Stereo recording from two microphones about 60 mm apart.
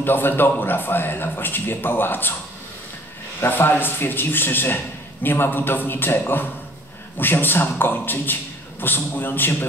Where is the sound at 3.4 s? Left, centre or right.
Left.